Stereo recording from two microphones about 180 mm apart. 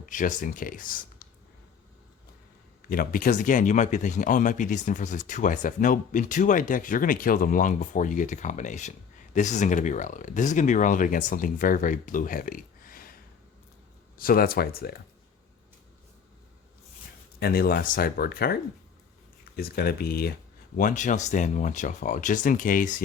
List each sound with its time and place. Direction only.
0.0 s speech: 45° left (ahead or behind)
2.9 s speech: 50° left (ahead or behind)
14.2 s speech: 55° left (ahead or behind)
17.4 s speech: 60° left (ahead or behind)
19.5 s speech: 60° left (ahead or behind)
20.7 s speech: 45° left (ahead or behind)